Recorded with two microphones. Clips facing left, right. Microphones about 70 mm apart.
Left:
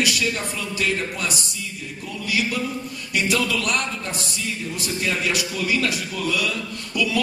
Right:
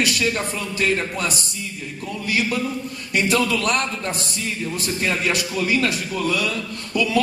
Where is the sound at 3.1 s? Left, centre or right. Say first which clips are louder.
Right 3 dB; right.